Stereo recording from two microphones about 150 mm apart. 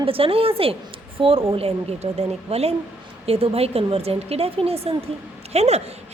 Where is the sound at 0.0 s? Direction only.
40° right (ahead or behind).